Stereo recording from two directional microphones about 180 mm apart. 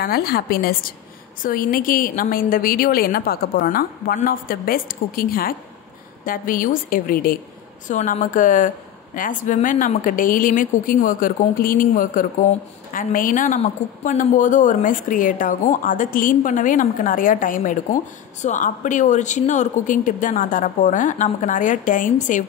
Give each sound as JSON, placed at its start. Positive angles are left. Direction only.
{"t": 0.0, "sound": "a woman's voice", "side_deg": 60}